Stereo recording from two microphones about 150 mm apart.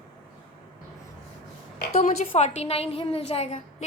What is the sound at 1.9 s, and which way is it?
A woman's voice, 55° left (ahead or behind).